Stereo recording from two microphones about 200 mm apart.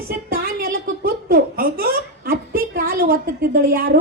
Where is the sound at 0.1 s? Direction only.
45° right (ahead or behind).